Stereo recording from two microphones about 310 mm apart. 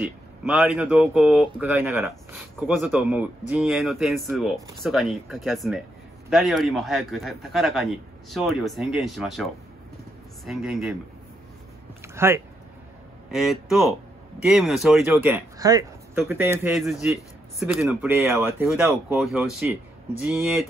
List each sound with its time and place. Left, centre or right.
0.0 s speech: centre
12.0 s speech: centre